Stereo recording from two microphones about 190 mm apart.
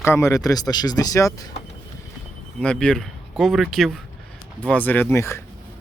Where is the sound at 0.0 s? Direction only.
15° left (ahead or behind).